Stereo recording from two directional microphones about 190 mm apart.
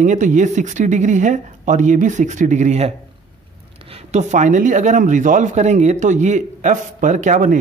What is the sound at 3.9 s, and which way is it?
Speech, 35° right (ahead or behind).